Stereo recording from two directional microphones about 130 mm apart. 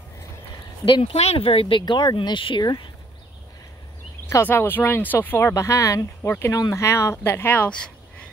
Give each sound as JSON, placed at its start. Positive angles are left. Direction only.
{"t": 0.8, "sound": "speech", "side_deg": 40}
{"t": 1.1, "sound": "speech", "side_deg": 50}
{"t": 4.3, "sound": "speech", "side_deg": 20}